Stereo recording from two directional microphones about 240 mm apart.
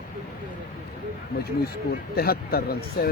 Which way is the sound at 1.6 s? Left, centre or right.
Left.